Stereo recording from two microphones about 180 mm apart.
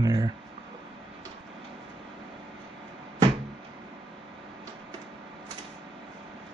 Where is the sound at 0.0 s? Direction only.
20° right (ahead or behind).